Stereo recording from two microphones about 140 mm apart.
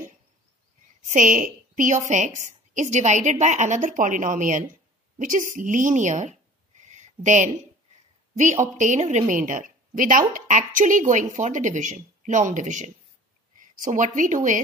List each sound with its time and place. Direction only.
1.0 s a woman's voice: 70° right (ahead or behind)
6.8 s a sound: 60° right (ahead or behind)
8.4 s a woman's voice: 60° right (ahead or behind)
9.3 s a woman's voice: 75° right (ahead or behind)